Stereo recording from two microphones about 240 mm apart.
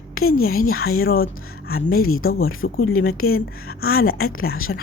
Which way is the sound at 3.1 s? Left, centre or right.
Left.